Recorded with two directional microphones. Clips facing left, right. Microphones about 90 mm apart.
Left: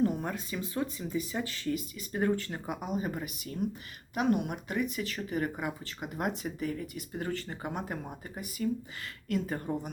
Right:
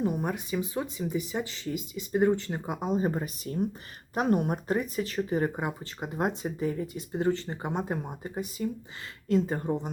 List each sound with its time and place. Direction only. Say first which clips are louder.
0.0 s speech: right 1 dB; 15° right (ahead or behind)